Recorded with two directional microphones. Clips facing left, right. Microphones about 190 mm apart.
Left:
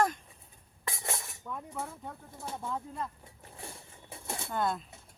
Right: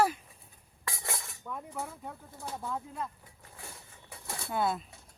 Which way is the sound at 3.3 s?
25° left (ahead or behind).